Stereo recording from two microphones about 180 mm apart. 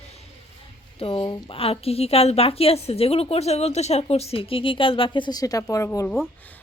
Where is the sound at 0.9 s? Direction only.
30° left (ahead or behind).